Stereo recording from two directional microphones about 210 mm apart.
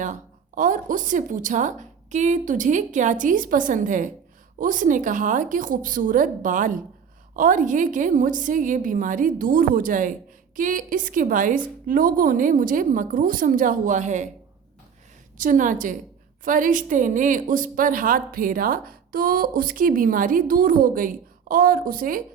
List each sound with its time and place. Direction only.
0.0 s a woman's voice: 40° right (ahead or behind)
15.4 s a woman's voice: 40° right (ahead or behind)